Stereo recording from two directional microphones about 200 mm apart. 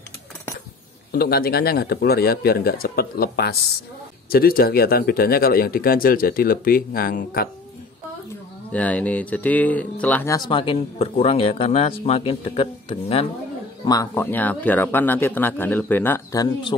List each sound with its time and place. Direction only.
1.1 s speech: 50° left (ahead or behind)
8.7 s speech: 5° left (ahead or behind); by 13.3 s 25° left (ahead or behind)
13.8 s speech: 15° left (ahead or behind)